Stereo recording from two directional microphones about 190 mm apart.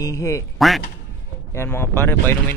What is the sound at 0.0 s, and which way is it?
Speech, 15° left (ahead or behind).